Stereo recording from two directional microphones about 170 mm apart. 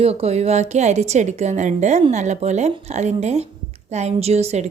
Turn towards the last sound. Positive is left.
turn(degrees=-40)  # may be behind; listen again after turning